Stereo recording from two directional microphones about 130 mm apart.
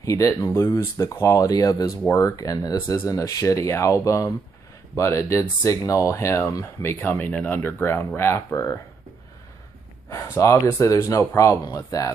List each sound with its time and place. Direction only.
0.0 s speech: 25° left (ahead or behind)
10.0 s speech: 20° left (ahead or behind)